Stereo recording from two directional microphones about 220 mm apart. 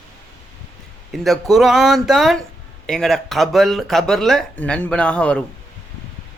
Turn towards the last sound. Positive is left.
turn(degrees=5)  # may be behind; listen again after turning